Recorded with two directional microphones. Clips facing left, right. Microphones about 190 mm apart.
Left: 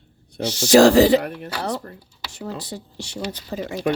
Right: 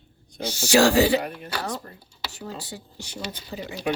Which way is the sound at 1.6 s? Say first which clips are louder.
Left 8 dB; 65° left (ahead or behind).